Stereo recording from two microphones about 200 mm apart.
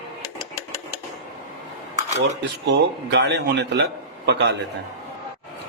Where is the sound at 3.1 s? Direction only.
60° right (ahead or behind).